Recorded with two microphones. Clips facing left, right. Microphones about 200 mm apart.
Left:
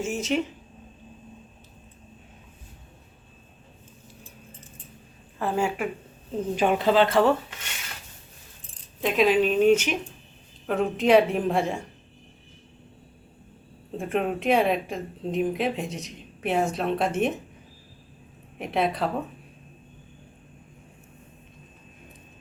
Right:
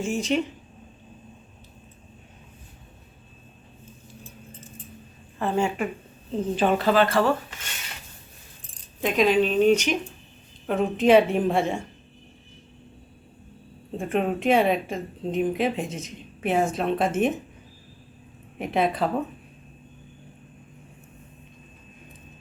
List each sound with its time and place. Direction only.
0.0 s speech: 5° left (ahead or behind)
5.4 s a woman's voice: 5° left (ahead or behind)
9.0 s speech: centre (ahead or behind)
13.9 s speech: centre (ahead or behind)
18.6 s speech: centre (ahead or behind)